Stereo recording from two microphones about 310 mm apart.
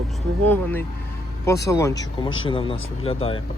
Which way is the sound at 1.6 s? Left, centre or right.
Centre.